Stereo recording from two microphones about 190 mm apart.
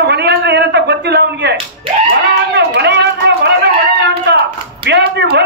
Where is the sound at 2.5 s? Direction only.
65° right (ahead or behind).